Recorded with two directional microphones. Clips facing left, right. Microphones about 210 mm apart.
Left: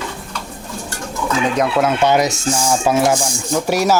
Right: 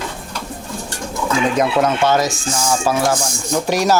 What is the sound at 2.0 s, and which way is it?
Speech, 20° left (ahead or behind).